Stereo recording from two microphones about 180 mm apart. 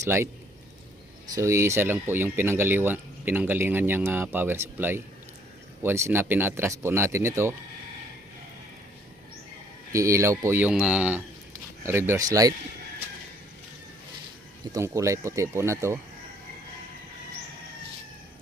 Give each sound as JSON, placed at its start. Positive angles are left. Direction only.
{"t": 0.0, "sound": "speech", "side_deg": -15}
{"t": 1.4, "sound": "speech", "side_deg": -15}
{"t": 9.9, "sound": "speech", "side_deg": -15}
{"t": 14.7, "sound": "speech", "side_deg": -15}